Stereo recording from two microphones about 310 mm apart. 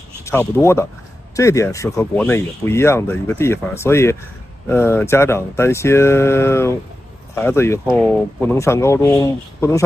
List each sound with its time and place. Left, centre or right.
0.2 s speech: centre